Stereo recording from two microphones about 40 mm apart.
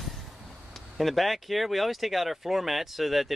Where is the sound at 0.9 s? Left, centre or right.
Centre.